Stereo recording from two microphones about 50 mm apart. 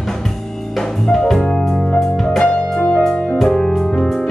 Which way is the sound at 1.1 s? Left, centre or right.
Centre.